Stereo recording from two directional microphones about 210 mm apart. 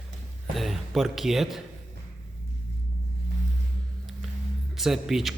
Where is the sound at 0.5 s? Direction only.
Centre (ahead or behind).